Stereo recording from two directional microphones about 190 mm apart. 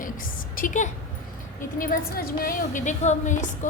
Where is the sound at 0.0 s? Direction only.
45° left (ahead or behind).